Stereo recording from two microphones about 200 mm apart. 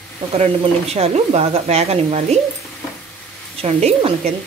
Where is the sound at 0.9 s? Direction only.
30° right (ahead or behind).